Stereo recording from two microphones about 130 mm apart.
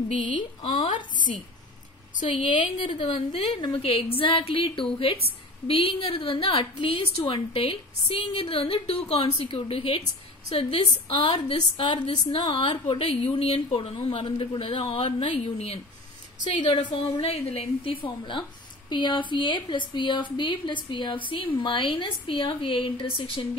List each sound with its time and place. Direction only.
0.2 s speech: 40° left (ahead or behind)
2.2 s a woman's voice: 40° left (ahead or behind)
16.5 s speech: 35° left (ahead or behind)
17.2 s a woman's voice: 50° left (ahead or behind)